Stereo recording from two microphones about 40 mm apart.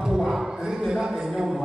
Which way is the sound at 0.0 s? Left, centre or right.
Centre.